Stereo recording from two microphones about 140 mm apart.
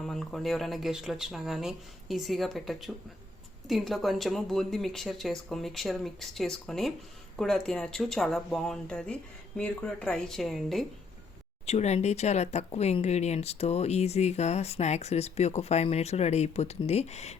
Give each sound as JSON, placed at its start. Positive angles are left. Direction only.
{"t": 0.0, "sound": "speech", "side_deg": 0}
{"t": 11.6, "sound": "speech", "side_deg": 50}